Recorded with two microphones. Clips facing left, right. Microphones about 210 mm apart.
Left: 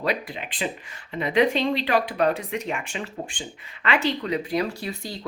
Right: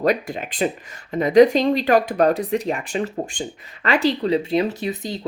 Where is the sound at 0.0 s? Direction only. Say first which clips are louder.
Right 7 dB; 45° right (ahead or behind).